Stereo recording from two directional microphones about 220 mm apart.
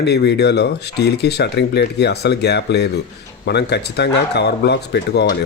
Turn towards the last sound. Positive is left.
turn(degrees=50)  # may be behind; listen again after turning